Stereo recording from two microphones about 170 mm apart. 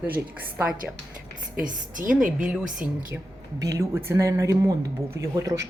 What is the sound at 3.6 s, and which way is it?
Speech, 20° right (ahead or behind).